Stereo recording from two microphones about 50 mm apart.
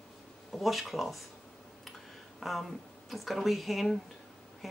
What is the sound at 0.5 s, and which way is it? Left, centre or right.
Speech, centre.